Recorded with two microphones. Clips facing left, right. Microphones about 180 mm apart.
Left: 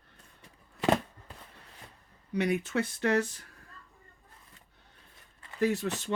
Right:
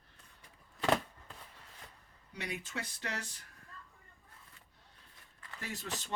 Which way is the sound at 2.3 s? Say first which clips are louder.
Left 13 dB; 60° left (ahead or behind).